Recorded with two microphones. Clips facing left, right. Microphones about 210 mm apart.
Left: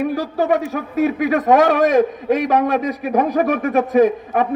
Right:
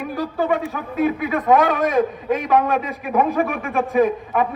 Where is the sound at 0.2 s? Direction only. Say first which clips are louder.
Left 3 dB; 45° left (ahead or behind).